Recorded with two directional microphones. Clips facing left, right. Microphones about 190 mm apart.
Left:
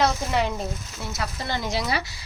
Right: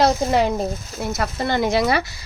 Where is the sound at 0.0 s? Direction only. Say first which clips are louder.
Right 6 dB; 40° right (ahead or behind).